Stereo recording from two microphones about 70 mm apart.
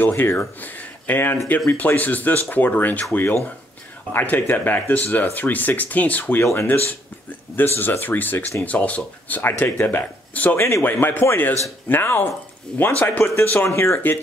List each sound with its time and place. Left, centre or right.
0.0 s speech: left
6.4 s speech: left
13.7 s speech: left